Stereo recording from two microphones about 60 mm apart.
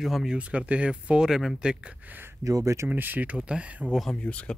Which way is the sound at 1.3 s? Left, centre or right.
Centre.